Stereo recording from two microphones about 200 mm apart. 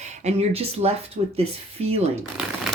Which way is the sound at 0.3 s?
30° right (ahead or behind).